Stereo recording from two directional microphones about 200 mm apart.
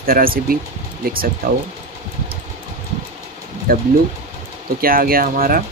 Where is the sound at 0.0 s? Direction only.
45° right (ahead or behind).